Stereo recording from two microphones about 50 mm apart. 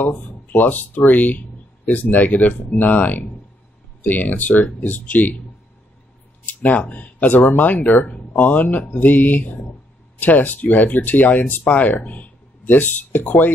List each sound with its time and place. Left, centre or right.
0.0 s speech: left
6.4 s speech: left